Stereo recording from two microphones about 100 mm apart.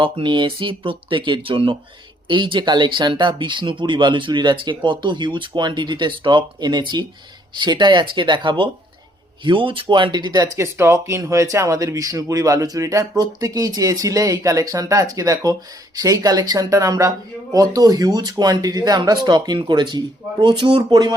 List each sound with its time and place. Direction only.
0.0 s speech: 55° right (ahead or behind)